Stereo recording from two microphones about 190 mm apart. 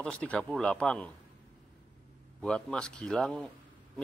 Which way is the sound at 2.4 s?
5° left (ahead or behind).